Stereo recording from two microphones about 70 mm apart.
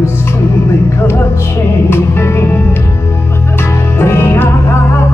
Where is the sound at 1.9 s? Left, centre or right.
Left.